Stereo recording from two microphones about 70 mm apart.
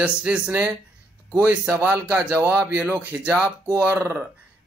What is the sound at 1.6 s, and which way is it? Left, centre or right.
Speech, right.